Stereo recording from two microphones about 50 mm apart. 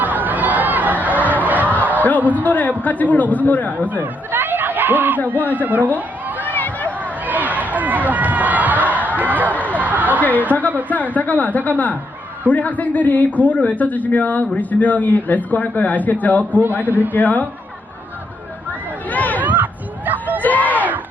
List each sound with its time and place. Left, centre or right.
0.0 s chatter: right
2.0 s a man's voice: left
3.8 s chatter: right
5.5 s speech: right
6.4 s run: left
7.0 s run: right
10.2 s speech: left
16.5 s a man's voice: right
17.1 s speech: left
19.1 s chatter: left
19.4 s a sound: right
20.4 s a sound: left